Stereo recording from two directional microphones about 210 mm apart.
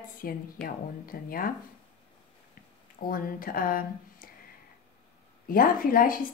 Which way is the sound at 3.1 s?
40° left (ahead or behind).